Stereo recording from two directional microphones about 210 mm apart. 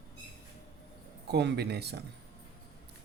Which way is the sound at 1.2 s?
50° right (ahead or behind).